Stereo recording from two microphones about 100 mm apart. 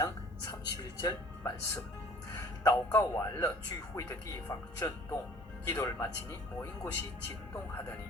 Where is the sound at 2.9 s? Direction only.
30° left (ahead or behind).